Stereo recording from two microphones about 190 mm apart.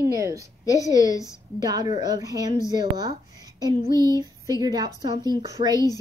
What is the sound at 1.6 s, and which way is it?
A woman's voice, 20° right (ahead or behind).